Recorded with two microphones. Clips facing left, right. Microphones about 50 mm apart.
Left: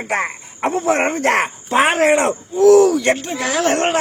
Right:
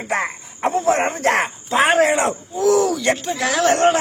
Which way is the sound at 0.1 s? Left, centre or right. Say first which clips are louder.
Left 1 dB; left.